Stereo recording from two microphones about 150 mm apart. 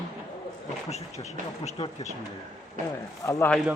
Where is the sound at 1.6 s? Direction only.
45° left (ahead or behind).